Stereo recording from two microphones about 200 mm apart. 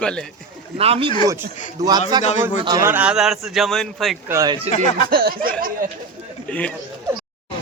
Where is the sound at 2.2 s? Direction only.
35° left (ahead or behind).